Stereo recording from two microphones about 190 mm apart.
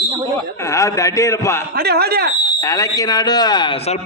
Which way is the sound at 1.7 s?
55° right (ahead or behind).